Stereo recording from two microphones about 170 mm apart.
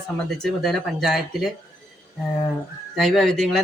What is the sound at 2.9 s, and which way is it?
Speech, centre (ahead or behind).